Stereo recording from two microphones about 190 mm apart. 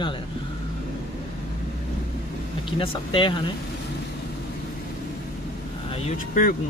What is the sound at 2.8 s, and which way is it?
Speech, 25° left (ahead or behind).